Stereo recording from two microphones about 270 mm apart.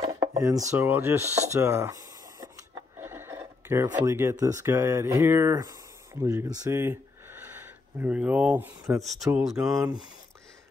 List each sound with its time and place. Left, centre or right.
0.0 s chopping: centre
1.5 s speech: centre
9.8 s speech: centre